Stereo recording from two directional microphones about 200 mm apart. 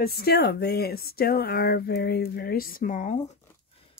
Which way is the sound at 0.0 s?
50° left (ahead or behind).